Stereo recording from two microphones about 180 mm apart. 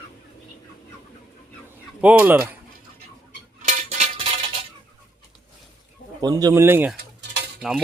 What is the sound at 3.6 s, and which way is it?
Cutlery, 40° right (ahead or behind).